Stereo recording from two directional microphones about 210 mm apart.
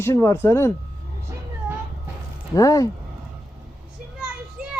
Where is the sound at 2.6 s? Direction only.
15° left (ahead or behind).